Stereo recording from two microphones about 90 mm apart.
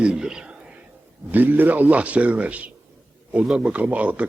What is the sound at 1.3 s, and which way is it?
A man's voice, 20° right (ahead or behind).